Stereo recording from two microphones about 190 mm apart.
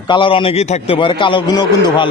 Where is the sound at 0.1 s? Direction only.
25° left (ahead or behind).